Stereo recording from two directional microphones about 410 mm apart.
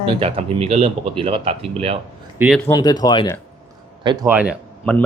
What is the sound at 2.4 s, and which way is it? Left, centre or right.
Speech, centre.